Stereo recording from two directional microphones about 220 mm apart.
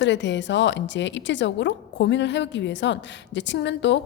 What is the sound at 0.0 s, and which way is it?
A woman's voice, 55° left (ahead or behind).